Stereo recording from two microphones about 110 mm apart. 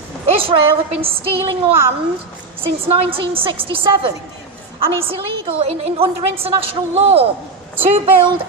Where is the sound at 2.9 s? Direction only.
60° right (ahead or behind).